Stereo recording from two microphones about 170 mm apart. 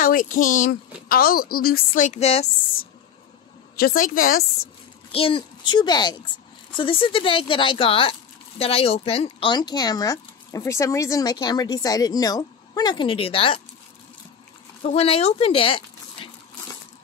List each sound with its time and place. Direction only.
0.0 s a woman's voice: 50° left (ahead or behind)
3.7 s speech: 60° left (ahead or behind)
5.1 s speech: 30° left (ahead or behind)
14.8 s speech: 40° left (ahead or behind)